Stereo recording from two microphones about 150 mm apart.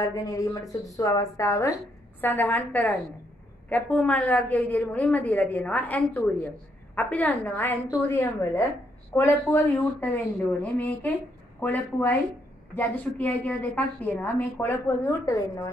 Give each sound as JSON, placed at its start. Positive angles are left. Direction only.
{"t": 0.0, "sound": "a woman's voice", "side_deg": 20}